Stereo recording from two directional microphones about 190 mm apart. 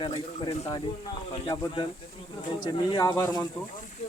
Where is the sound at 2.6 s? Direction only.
20° left (ahead or behind).